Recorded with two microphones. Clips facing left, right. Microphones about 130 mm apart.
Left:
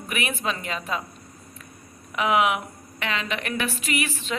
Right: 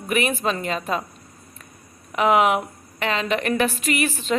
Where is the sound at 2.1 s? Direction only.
40° right (ahead or behind).